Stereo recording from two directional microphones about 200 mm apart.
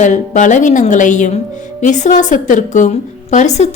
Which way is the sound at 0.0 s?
40° left (ahead or behind).